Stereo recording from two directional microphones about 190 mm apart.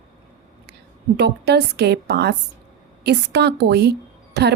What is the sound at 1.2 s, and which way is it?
A woman's voice, 60° right (ahead or behind).